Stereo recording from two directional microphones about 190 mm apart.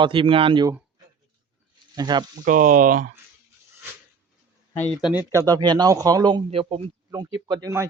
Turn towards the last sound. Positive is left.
turn(degrees=-15)  # may be behind; listen again after turning